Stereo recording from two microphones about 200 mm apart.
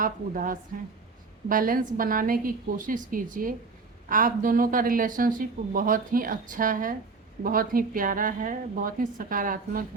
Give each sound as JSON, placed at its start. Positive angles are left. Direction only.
{"t": 0.0, "sound": "speech", "side_deg": -45}